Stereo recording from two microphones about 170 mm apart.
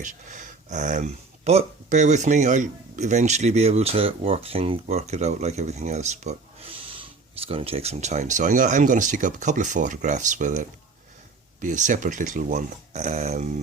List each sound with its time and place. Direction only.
0.0 s speech: 50° right (ahead or behind)